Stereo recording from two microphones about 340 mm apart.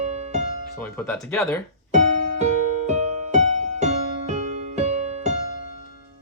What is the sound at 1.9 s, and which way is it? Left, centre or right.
Music, right.